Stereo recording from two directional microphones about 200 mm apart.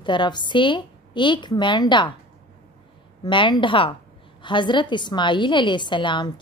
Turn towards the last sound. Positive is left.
turn(degrees=25)  # may be behind; listen again after turning